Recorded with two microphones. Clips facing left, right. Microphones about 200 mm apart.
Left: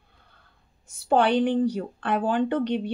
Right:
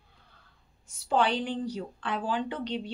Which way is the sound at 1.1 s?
55° left (ahead or behind).